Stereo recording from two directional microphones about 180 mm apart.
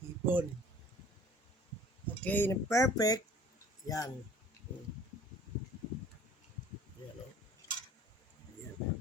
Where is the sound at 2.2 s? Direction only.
10° left (ahead or behind).